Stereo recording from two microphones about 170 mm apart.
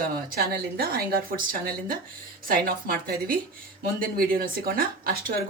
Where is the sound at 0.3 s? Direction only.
65° right (ahead or behind).